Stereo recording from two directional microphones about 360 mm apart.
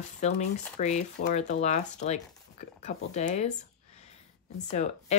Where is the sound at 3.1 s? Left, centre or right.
Centre.